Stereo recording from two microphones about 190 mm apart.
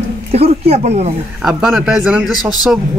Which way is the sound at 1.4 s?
5° right (ahead or behind).